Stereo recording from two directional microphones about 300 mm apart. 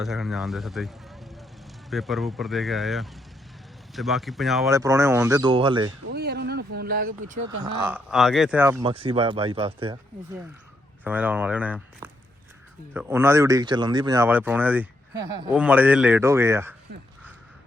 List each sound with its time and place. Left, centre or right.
0.0 s a man's voice: centre
6.1 s speech: right
7.6 s speech: centre
11.0 s a man's voice: centre
12.9 s a man's voice: centre